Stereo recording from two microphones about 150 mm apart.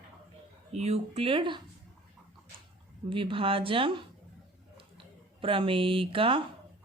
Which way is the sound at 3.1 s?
35° right (ahead or behind).